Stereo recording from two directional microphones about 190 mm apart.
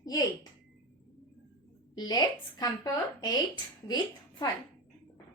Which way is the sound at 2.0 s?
20° left (ahead or behind).